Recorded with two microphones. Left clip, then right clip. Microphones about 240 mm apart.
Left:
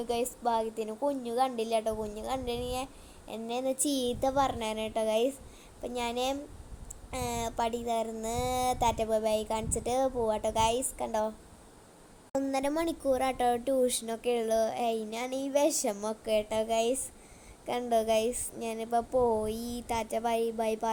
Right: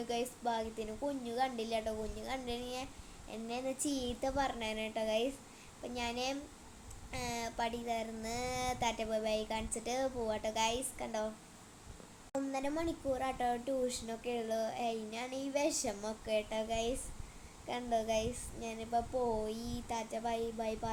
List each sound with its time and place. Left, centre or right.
0.1 s speech: left
12.3 s speech: left